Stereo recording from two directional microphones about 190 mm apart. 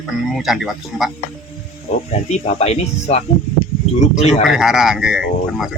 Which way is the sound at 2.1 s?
35° left (ahead or behind).